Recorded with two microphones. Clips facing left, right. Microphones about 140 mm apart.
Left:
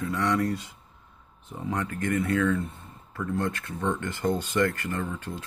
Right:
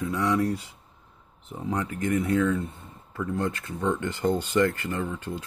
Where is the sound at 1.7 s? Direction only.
15° right (ahead or behind).